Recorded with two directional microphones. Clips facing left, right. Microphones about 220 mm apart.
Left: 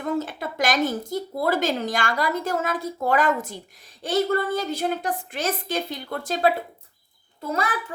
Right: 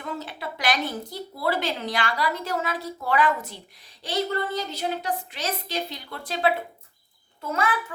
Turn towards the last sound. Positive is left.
turn(degrees=35)  # may be behind; listen again after turning